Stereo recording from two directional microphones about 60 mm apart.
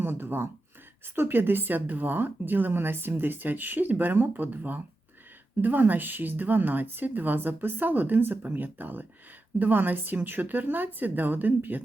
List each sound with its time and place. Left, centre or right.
0.0 s speech: right